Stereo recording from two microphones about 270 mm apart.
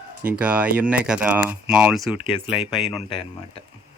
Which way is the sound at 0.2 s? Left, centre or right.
Centre.